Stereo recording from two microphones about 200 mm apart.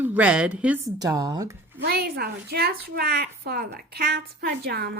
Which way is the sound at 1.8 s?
50° right (ahead or behind).